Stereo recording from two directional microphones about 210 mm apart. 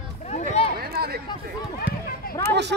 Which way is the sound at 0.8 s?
50° right (ahead or behind).